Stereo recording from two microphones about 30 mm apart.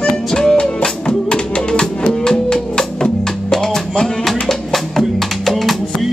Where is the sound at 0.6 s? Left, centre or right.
Left.